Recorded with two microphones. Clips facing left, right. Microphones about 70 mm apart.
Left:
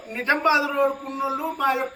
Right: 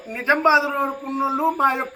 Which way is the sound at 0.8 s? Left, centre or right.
Right.